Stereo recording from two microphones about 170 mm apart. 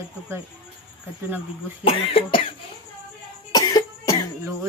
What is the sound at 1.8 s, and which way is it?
Speech, 30° left (ahead or behind).